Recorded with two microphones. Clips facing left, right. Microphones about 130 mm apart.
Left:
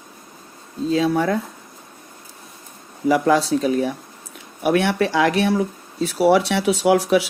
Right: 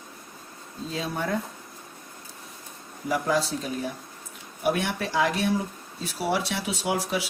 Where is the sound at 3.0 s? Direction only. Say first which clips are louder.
Left 9 dB; 90° left.